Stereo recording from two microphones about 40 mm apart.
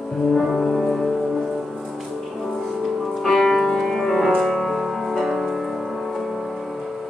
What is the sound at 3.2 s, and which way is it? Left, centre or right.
Music, centre.